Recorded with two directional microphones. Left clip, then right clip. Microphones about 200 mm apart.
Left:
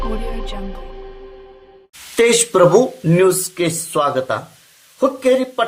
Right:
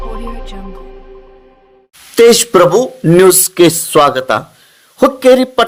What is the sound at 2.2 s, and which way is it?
Speech, 30° right (ahead or behind).